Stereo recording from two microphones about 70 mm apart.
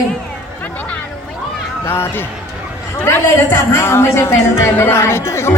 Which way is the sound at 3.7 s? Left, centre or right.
Left.